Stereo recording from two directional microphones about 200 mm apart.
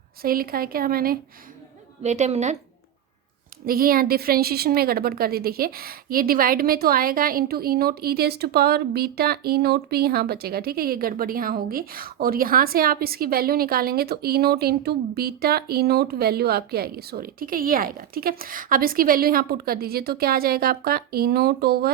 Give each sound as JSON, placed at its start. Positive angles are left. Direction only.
{"t": 0.2, "sound": "a woman's voice", "side_deg": -45}
{"t": 2.0, "sound": "a woman's voice", "side_deg": -35}
{"t": 3.7, "sound": "a woman's voice", "side_deg": -45}